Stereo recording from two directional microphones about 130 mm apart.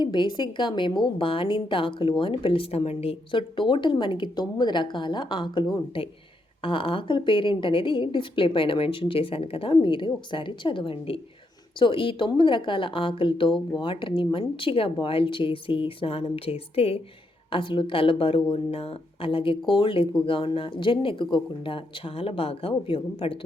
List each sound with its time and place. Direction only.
0.0 s a woman's voice: 35° left (ahead or behind)